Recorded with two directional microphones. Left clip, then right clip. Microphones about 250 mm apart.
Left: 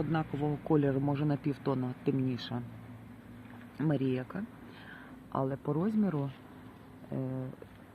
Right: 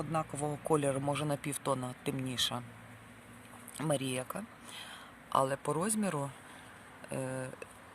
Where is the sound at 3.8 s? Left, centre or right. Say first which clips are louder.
Left 1 dB; right.